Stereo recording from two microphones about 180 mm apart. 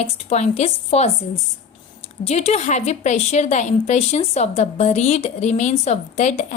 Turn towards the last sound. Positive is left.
turn(degrees=40)  # may be behind; listen again after turning